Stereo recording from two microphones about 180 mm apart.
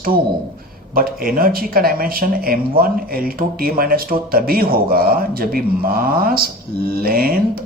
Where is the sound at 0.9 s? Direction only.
55° right (ahead or behind).